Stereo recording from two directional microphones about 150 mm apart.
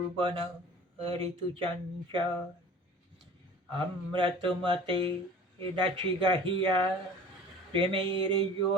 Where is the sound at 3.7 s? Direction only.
35° right (ahead or behind).